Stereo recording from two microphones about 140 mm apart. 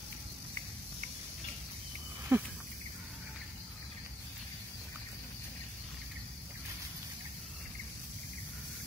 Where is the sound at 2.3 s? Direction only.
15° right (ahead or behind).